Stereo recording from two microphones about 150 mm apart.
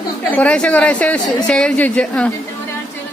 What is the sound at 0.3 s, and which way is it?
Speech, 10° left (ahead or behind).